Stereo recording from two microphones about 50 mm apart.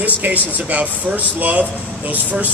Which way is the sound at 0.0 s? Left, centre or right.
Right.